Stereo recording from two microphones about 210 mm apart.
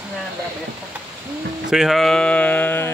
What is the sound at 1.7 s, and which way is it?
Speech, centre (ahead or behind).